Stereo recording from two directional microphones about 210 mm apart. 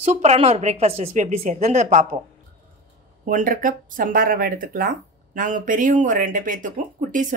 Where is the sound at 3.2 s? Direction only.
40° right (ahead or behind).